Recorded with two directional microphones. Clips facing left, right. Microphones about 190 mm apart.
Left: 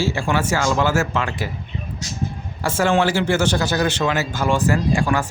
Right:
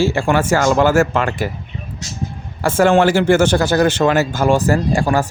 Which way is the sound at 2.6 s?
50° right (ahead or behind).